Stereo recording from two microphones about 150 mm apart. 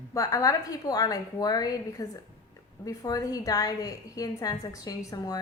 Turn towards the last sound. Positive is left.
turn(degrees=25)  # may be behind; listen again after turning